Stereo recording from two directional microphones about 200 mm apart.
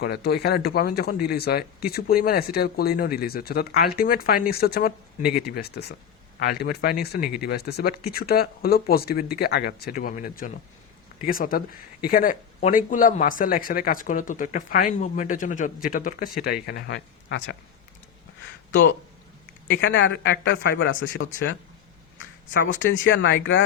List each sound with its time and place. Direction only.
0.0 s speech: 55° left (ahead or behind)
19.7 s speech: 65° left (ahead or behind)
22.8 s speech: 70° left (ahead or behind)